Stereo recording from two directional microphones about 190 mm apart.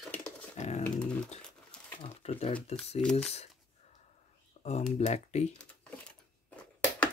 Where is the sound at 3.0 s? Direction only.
5° left (ahead or behind).